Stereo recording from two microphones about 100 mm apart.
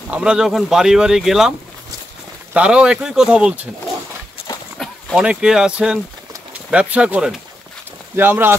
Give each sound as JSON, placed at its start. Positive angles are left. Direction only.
{"t": 0.1, "sound": "speech", "side_deg": -10}
{"t": 2.5, "sound": "speech", "side_deg": -10}
{"t": 5.2, "sound": "speech", "side_deg": -10}
{"t": 8.2, "sound": "speech", "side_deg": -20}